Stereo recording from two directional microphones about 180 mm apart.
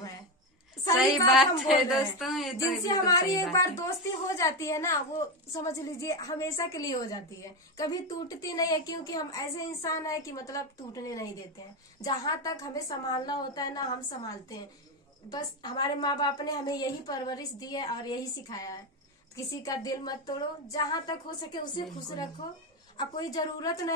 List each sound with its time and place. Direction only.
1.3 s speech: centre (ahead or behind)
2.9 s a woman's voice: 20° left (ahead or behind)
22.9 s a woman's voice: 20° left (ahead or behind)